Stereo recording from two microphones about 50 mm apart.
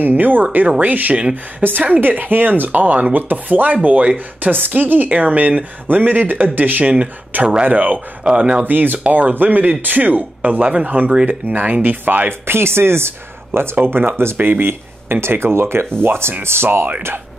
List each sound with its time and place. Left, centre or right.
0.0 s a woman's voice: right
4.5 s a woman's voice: right
8.2 s speech: right
8.6 s a woman's voice: right
12.3 s speech: right